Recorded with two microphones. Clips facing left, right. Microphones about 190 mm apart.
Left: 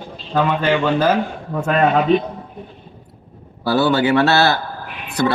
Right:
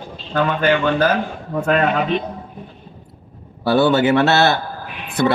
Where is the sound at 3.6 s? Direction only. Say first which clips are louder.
Right 2 dB; 25° right (ahead or behind).